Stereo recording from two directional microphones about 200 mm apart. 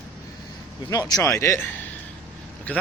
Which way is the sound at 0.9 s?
20° left (ahead or behind).